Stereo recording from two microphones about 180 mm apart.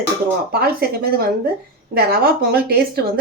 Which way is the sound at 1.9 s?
60° right (ahead or behind).